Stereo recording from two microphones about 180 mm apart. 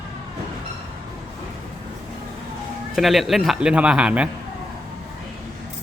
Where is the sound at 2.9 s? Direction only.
Centre (ahead or behind).